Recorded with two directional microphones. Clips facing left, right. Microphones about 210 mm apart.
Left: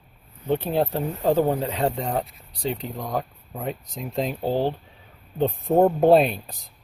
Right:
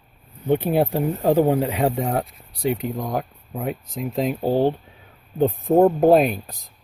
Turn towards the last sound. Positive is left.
turn(degrees=0)  # may be behind; listen again after turning